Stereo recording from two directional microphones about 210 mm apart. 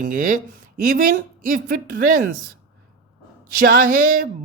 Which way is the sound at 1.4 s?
40° right (ahead or behind).